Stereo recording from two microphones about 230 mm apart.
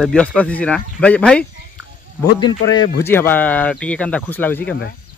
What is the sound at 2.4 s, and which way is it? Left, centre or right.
Speech, left.